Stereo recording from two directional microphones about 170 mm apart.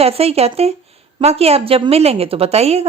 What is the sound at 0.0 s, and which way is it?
A woman's voice, 35° right (ahead or behind).